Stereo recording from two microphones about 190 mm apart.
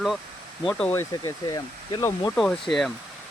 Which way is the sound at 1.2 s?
20° left (ahead or behind).